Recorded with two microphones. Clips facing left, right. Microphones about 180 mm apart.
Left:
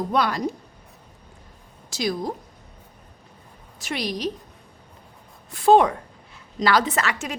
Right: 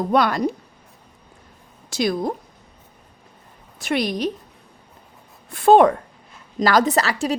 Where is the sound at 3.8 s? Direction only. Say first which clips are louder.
Right 5 dB; 55° right (ahead or behind).